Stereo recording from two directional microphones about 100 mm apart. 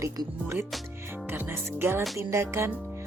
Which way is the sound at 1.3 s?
20° right (ahead or behind).